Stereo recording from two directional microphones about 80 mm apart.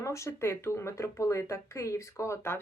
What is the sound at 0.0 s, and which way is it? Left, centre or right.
Speech, left.